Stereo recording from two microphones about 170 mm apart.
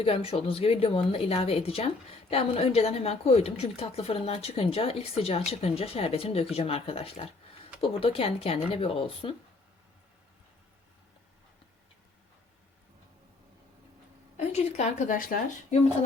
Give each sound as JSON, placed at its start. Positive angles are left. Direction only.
{"t": 0.0, "sound": "a woman's voice", "side_deg": 35}
{"t": 14.3, "sound": "a woman's voice", "side_deg": 40}